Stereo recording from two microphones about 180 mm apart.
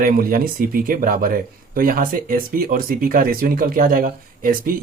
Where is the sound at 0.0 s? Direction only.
55° right (ahead or behind).